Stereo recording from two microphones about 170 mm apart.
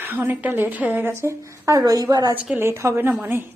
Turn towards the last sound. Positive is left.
turn(degrees=-10)  # may be behind; listen again after turning